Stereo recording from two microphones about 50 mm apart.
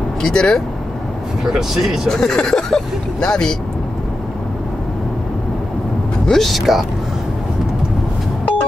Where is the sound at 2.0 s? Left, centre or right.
Centre.